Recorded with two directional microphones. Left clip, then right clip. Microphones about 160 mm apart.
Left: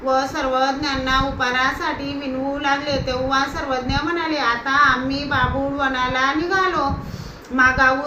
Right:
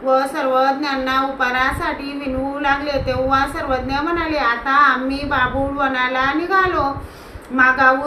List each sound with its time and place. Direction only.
0.1 s a woman's voice: 15° right (ahead or behind)